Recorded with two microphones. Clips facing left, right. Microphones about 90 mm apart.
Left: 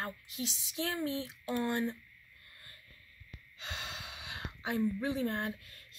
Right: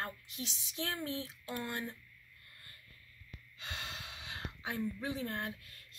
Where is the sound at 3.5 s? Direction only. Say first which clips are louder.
Left 2 dB; 20° left (ahead or behind).